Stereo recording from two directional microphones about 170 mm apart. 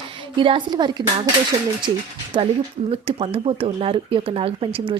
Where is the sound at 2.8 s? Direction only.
35° right (ahead or behind).